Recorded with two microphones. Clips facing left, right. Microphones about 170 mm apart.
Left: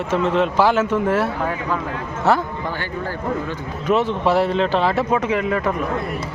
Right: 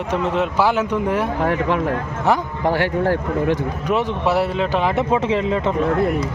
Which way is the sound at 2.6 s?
80° right.